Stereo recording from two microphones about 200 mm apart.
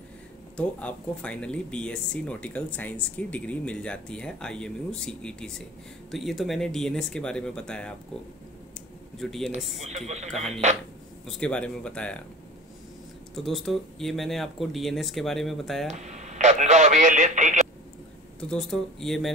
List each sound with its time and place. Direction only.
0.6 s speech: 5° left (ahead or behind)
9.2 s speech: centre (ahead or behind)
9.8 s a man's voice: 35° right (ahead or behind)
11.2 s speech: 5° left (ahead or behind)
13.3 s speech: centre (ahead or behind)
15.9 s a man's voice: 35° right (ahead or behind)
18.4 s speech: 5° left (ahead or behind)